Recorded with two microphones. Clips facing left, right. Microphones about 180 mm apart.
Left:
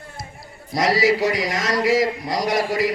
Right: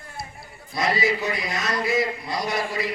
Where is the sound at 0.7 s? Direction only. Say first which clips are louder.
Left 5 dB; 90° left.